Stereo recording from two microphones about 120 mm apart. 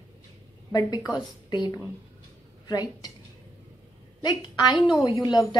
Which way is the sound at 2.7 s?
35° left (ahead or behind).